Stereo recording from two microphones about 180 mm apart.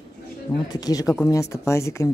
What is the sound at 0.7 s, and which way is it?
Speech, 20° left (ahead or behind).